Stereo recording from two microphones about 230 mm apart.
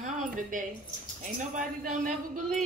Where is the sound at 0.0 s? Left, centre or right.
Right.